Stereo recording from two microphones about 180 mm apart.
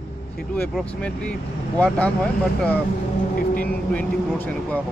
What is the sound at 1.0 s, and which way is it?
Speech, 5° left (ahead or behind).